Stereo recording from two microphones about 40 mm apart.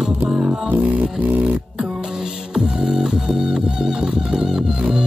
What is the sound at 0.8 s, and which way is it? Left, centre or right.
Music, right.